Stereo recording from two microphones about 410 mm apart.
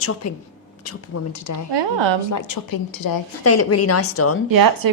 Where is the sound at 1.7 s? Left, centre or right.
Right.